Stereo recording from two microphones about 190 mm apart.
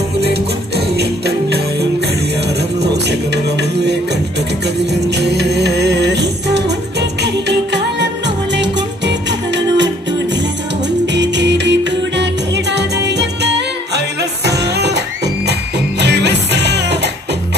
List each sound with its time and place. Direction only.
0.2 s music: 60° right (ahead or behind)
3.1 s music: 65° right (ahead or behind)
5.1 s music: 60° right (ahead or behind)
11.1 s music: 65° right (ahead or behind)